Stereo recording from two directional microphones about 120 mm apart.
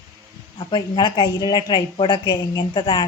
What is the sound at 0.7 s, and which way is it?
A woman's voice, 35° left (ahead or behind).